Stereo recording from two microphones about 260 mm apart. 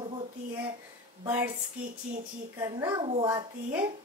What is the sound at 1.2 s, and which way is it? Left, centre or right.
Child singing, centre.